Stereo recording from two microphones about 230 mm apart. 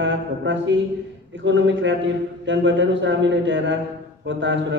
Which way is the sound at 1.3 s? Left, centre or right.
Right.